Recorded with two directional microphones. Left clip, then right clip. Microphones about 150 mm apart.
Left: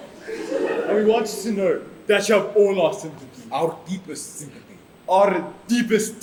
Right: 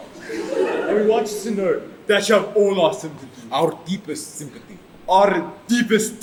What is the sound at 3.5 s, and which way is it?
Speech, 10° right (ahead or behind).